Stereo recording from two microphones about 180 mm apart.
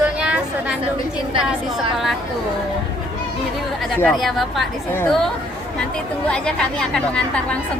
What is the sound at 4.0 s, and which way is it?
A woman's voice, 5° left (ahead or behind).